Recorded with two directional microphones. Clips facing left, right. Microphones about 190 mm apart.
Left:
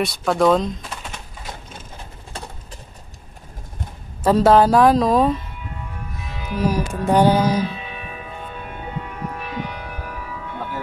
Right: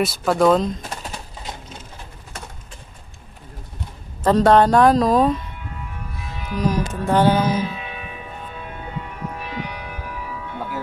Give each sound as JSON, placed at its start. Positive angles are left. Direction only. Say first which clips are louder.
{"t": 0.0, "sound": "a woman's voice", "louder": "right 1 dB", "side_deg": 0}
{"t": 0.8, "sound": "typing", "louder": "right 2 dB", "side_deg": -40}
{"t": 2.3, "sound": "a sound", "louder": "left 3 dB", "side_deg": 30}
{"t": 4.2, "sound": "a woman's voice", "louder": "even", "side_deg": 5}
{"t": 6.5, "sound": "speech", "louder": "left 1 dB", "side_deg": 10}